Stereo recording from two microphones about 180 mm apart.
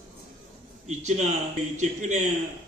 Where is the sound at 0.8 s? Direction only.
40° right (ahead or behind).